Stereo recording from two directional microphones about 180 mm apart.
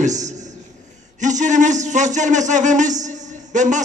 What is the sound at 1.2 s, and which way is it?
A man's voice, 40° right (ahead or behind).